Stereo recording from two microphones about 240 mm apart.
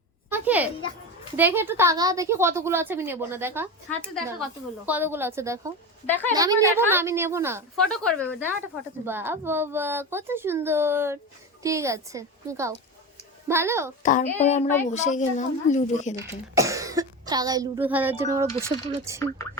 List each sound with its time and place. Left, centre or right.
0.3 s a sound: centre
1.4 s a woman's voice: centre
6.1 s a woman's voice: centre
6.3 s a woman's voice: centre
7.9 s speech: centre
9.0 s a woman's voice: centre
14.0 s a child's voice: left
16.1 s a woman's voice: centre